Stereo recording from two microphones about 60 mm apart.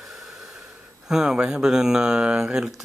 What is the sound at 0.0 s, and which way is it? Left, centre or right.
Speech, centre.